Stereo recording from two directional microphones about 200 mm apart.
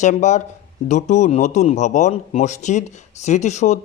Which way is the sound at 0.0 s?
35° left (ahead or behind).